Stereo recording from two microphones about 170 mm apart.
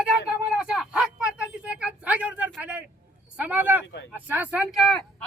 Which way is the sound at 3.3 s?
10° right (ahead or behind).